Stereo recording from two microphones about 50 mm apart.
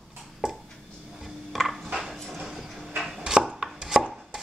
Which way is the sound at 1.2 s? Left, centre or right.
Centre.